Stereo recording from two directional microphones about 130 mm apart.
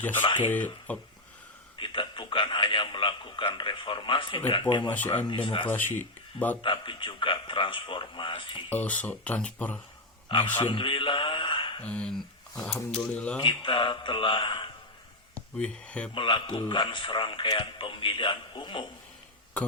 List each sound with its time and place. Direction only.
0.0 s speech: 15° left (ahead or behind)
1.8 s a man's voice: 40° left (ahead or behind)
5.6 s speech: 15° left (ahead or behind)
6.6 s a man's voice: 40° left (ahead or behind)
8.7 s speech: 10° left (ahead or behind)
10.6 s a man's voice: 40° left (ahead or behind)
11.8 s speech: 10° left (ahead or behind)
13.4 s a man's voice: 40° left (ahead or behind)
15.4 s speech: 10° left (ahead or behind)
16.1 s a man's voice: 40° left (ahead or behind)